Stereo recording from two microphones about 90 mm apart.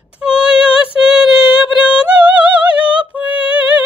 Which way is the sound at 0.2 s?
10° right (ahead or behind).